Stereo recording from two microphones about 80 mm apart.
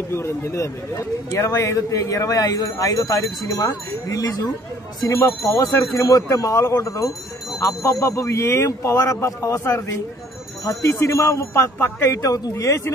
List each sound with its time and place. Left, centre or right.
0.1 s speech: left
12.2 s speech: left